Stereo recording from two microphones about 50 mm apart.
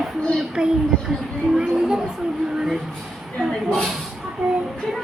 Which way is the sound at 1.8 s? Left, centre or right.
Centre.